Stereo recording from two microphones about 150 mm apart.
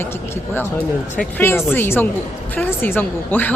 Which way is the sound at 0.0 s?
15° left (ahead or behind).